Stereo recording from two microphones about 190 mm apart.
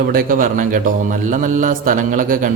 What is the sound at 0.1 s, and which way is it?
A man's voice, 45° right (ahead or behind).